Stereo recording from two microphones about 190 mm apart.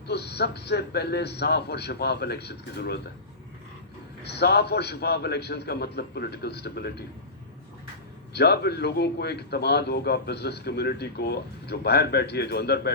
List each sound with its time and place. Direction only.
0.1 s a man's voice: 60° left (ahead or behind)
4.2 s a man's voice: 60° left (ahead or behind)
8.3 s a man's voice: 60° left (ahead or behind)